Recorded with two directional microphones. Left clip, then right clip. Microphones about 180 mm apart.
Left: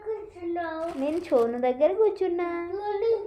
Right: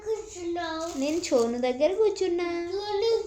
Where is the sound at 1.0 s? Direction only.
25° right (ahead or behind).